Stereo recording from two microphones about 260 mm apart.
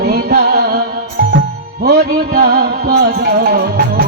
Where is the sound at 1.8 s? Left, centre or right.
Right.